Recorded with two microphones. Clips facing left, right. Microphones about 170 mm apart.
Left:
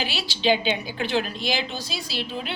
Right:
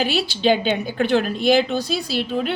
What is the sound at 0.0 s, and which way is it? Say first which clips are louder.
A woman's voice: right 6 dB; 50° right (ahead or behind).